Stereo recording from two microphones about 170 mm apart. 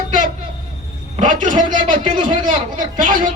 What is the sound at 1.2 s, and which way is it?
Speech, 50° right (ahead or behind).